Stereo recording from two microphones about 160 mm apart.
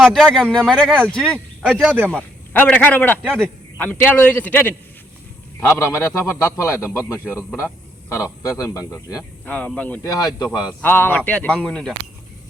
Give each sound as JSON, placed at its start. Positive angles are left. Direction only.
{"t": 0.0, "sound": "speech", "side_deg": 0}
{"t": 2.0, "sound": "a man's voice", "side_deg": 10}
{"t": 9.5, "sound": "a man's voice", "side_deg": 10}
{"t": 10.1, "sound": "speech", "side_deg": 25}
{"t": 10.8, "sound": "a man's voice", "side_deg": 10}